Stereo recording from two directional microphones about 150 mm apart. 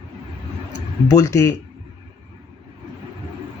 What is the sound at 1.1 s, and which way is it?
Speech, 20° left (ahead or behind).